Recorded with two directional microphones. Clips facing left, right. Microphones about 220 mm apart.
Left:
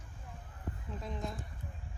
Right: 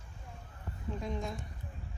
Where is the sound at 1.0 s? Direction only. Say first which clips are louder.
Right 2 dB; centre (ahead or behind).